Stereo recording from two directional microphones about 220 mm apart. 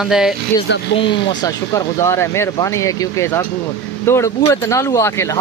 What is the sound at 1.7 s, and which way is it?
Speech, 15° left (ahead or behind).